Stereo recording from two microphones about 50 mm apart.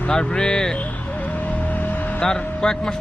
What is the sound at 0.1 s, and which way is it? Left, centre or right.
Speech, centre.